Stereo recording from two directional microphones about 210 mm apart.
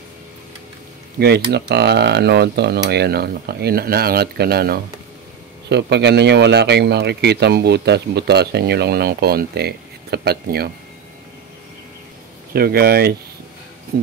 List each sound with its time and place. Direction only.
1.2 s speech: 50° right (ahead or behind)
12.5 s speech: 45° right (ahead or behind)